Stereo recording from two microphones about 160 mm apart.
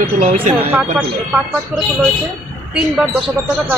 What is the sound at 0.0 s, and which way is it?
Speech, 55° right (ahead or behind).